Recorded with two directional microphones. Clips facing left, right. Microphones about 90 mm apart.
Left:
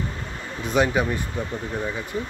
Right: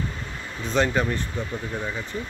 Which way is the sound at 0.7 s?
10° left (ahead or behind).